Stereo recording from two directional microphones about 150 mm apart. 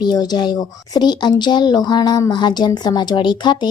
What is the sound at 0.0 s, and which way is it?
Speech, 25° left (ahead or behind).